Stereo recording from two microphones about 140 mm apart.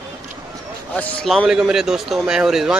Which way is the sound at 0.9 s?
10° left (ahead or behind).